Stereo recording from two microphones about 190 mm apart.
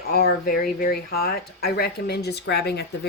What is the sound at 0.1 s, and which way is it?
Speech, 55° left (ahead or behind).